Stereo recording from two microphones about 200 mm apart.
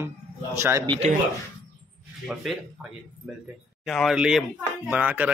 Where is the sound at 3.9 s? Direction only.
Centre (ahead or behind).